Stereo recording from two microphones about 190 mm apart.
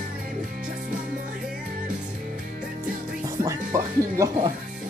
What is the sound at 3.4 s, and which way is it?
Music, 15° right (ahead or behind).